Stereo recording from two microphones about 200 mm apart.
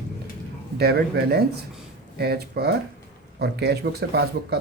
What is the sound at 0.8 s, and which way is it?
Speech, 55° right (ahead or behind).